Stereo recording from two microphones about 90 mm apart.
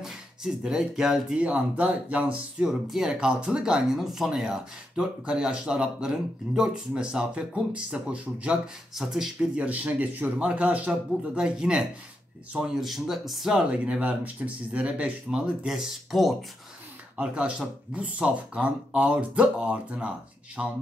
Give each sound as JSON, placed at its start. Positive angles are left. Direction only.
{"t": 0.0, "sound": "speech", "side_deg": -5}
{"t": 2.7, "sound": "speech", "side_deg": -5}
{"t": 9.7, "sound": "speech", "side_deg": -15}
{"t": 13.7, "sound": "speech", "side_deg": -15}
{"t": 17.2, "sound": "speech", "side_deg": -10}